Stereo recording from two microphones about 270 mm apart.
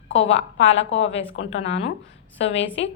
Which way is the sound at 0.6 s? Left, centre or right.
Left.